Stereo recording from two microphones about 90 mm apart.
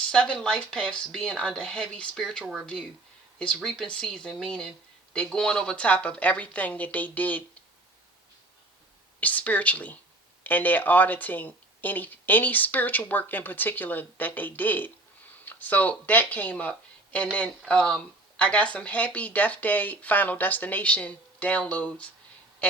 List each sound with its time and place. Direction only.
0.0 s speech: 10° left (ahead or behind)
9.2 s speech: 15° left (ahead or behind)